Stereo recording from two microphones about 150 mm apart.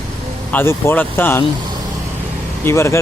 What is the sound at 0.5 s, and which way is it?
Speech, 15° left (ahead or behind).